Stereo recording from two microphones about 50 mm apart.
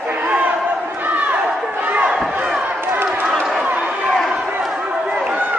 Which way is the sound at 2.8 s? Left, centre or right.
Right.